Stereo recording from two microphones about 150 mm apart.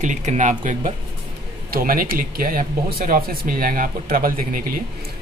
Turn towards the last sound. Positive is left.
turn(degrees=-70)  # may be behind; listen again after turning